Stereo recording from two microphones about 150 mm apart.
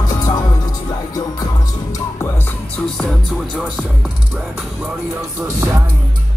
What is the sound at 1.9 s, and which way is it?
Music, 15° left (ahead or behind).